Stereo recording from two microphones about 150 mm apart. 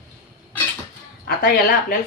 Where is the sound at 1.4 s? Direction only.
80° left.